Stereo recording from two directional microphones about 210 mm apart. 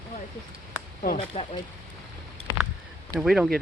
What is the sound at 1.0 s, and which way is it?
Speech, 30° left (ahead or behind).